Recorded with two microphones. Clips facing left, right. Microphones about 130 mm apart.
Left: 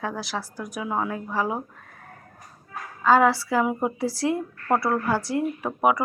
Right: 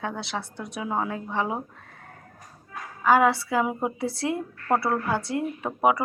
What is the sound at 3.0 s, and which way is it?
Speech, 15° right (ahead or behind).